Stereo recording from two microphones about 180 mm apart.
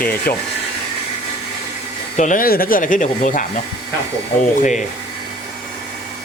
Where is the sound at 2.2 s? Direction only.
50° left (ahead or behind).